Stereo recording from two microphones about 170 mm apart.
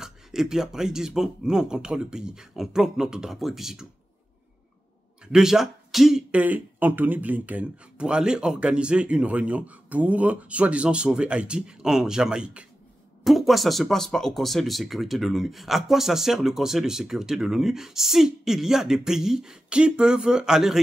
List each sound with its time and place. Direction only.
0.0 s speech: 5° right (ahead or behind)
5.3 s speech: 5° right (ahead or behind)